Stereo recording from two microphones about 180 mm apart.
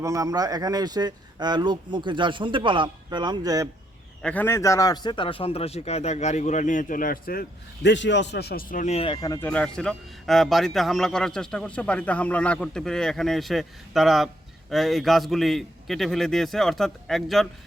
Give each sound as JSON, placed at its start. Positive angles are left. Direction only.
{"t": 0.0, "sound": "speech", "side_deg": -20}
{"t": 4.2, "sound": "speech", "side_deg": 10}
{"t": 9.1, "sound": "speech", "side_deg": 20}
{"t": 9.5, "sound": "a man's voice", "side_deg": 5}